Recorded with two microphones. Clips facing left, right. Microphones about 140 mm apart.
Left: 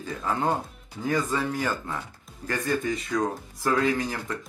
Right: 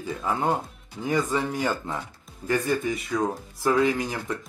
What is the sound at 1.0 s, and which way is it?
Speech, 15° right (ahead or behind).